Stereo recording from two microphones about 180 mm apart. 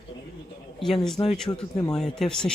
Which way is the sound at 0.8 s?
Centre (ahead or behind).